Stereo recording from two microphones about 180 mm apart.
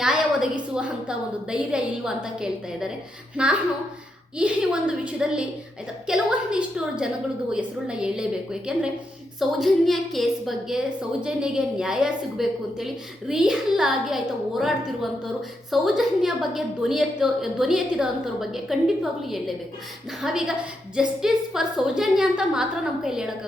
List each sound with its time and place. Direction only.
0.0 s a woman's voice: 5° right (ahead or behind)